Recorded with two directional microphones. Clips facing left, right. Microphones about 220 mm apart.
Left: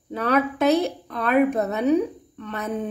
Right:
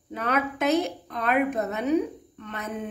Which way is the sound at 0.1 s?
35° left (ahead or behind).